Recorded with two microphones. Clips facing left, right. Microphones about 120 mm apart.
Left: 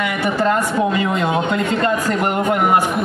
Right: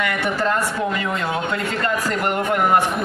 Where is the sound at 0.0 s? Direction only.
5° left (ahead or behind).